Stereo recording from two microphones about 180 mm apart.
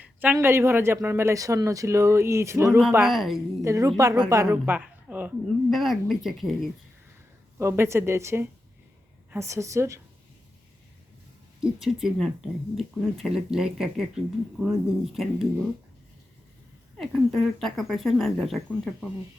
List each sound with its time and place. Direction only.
0.0 s a sound: 10° right (ahead or behind)
0.3 s a man's voice: 15° right (ahead or behind)
3.0 s speech: centre (ahead or behind)
3.6 s a man's voice: 15° right (ahead or behind); by 6.7 s centre (ahead or behind)
7.6 s a man's voice: 15° right (ahead or behind)
11.6 s speech: centre (ahead or behind)
17.0 s speech: centre (ahead or behind)